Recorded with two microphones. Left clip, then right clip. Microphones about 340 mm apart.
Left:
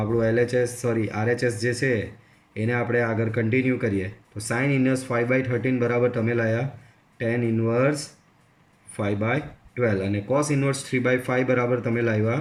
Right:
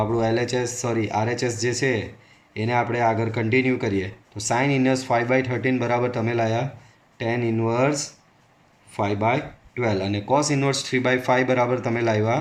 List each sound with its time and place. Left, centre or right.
0.2 s speech: centre
9.0 s speech: centre